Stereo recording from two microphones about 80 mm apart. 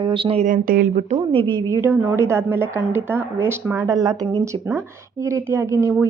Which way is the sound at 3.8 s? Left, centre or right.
Right.